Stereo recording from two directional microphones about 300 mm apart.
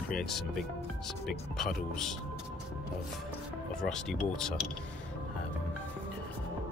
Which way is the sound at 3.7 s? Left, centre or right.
Centre.